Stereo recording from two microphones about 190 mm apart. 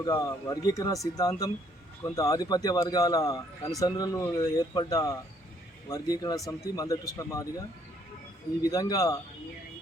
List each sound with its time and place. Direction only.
0.0 s speech: 20° left (ahead or behind)
8.6 s speech: 20° left (ahead or behind)